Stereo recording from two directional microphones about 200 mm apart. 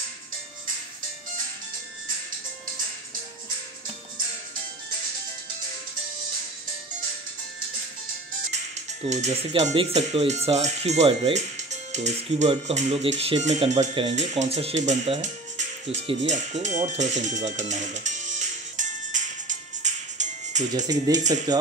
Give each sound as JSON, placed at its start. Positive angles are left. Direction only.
{"t": 9.0, "sound": "speech", "side_deg": -35}
{"t": 20.7, "sound": "speech", "side_deg": -20}